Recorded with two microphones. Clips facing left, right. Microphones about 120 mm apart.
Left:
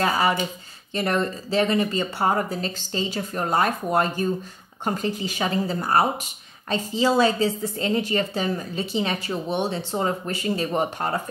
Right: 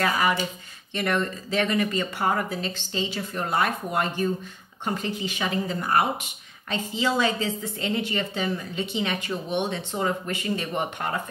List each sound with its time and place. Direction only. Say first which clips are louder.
0.0 s a woman's voice: left 2 dB; 30° left (ahead or behind)